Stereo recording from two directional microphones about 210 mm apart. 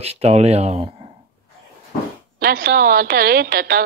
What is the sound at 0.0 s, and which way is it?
Speech, 30° right (ahead or behind).